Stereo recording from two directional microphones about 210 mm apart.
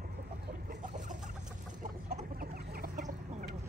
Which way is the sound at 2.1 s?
45° right (ahead or behind).